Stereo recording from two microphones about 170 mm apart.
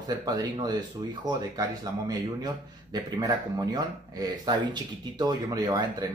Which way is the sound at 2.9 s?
25° right (ahead or behind).